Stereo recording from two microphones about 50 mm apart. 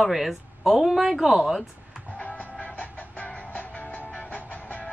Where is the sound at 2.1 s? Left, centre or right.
Left.